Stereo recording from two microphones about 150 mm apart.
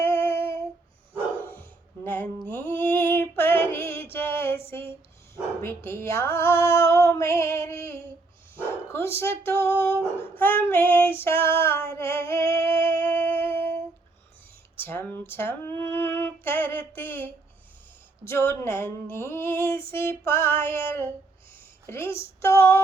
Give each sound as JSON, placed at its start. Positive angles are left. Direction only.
{"t": 0.0, "sound": "female singing", "side_deg": 15}
{"t": 2.0, "sound": "a sound", "side_deg": 10}
{"t": 5.6, "sound": "female singing", "side_deg": 15}
{"t": 8.9, "sound": "speech", "side_deg": 15}
{"t": 11.9, "sound": "music", "side_deg": 15}
{"t": 14.8, "sound": "a sound", "side_deg": 15}
{"t": 18.3, "sound": "speech", "side_deg": 15}